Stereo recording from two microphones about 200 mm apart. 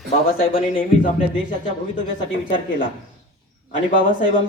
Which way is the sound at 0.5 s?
45° left (ahead or behind).